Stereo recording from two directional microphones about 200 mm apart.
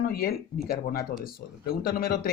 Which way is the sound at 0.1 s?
50° left (ahead or behind).